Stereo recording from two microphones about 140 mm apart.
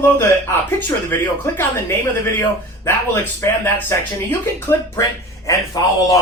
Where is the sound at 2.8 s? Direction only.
20° left (ahead or behind).